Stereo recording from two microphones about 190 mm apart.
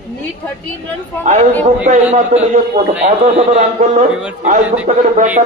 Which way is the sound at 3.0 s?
35° right (ahead or behind).